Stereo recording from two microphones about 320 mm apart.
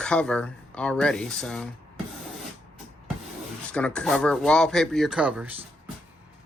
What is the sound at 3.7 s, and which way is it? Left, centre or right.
Speech, centre.